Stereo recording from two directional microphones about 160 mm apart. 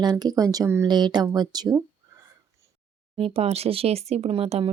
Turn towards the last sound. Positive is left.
turn(degrees=-40)  # may be behind; listen again after turning